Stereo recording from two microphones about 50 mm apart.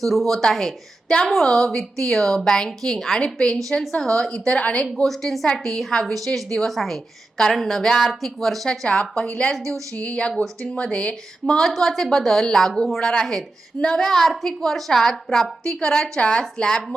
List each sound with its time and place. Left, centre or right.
0.0 s a woman's voice: centre
5.0 s a woman's voice: centre
9.9 s speech: left
11.8 s a woman's voice: centre